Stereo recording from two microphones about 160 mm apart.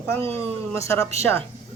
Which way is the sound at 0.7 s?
20° left (ahead or behind).